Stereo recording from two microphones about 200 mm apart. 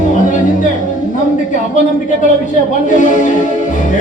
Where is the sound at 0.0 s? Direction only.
40° left (ahead or behind).